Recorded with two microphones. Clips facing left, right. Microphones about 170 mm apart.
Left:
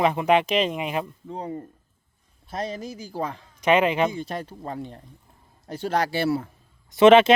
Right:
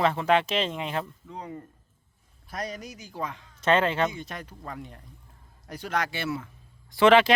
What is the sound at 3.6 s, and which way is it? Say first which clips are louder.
Speech: left 3 dB; 10° left (ahead or behind).